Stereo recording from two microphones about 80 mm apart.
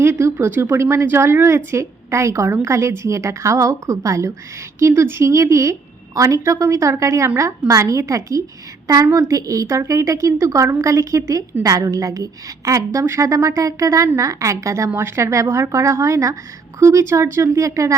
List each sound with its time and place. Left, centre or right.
0.0 s a woman's voice: right